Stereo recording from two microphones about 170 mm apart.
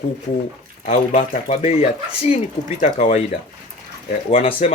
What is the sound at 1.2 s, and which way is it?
Speech, 40° left (ahead or behind).